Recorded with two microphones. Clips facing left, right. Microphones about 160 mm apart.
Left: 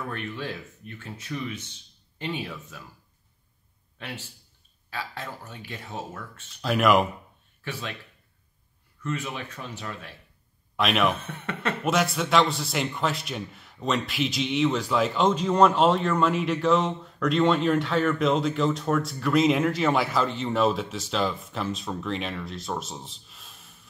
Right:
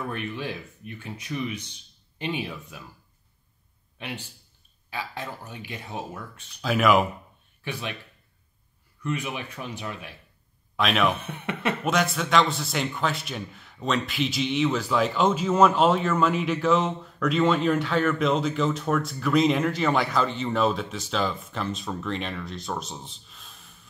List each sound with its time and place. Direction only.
0.0 s speech: 15° right (ahead or behind)
4.0 s speech: 20° right (ahead or behind)
6.6 s a man's voice: centre (ahead or behind)
7.6 s speech: 15° right (ahead or behind)
9.0 s speech: 15° right (ahead or behind)
10.8 s a man's voice: centre (ahead or behind)
11.1 s speech: 15° right (ahead or behind)
11.8 s a man's voice: centre (ahead or behind)